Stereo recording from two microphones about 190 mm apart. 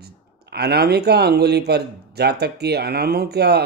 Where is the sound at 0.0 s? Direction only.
60° right (ahead or behind).